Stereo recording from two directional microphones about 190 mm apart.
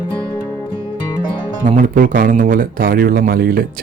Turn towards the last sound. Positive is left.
turn(degrees=-50)  # may be behind; listen again after turning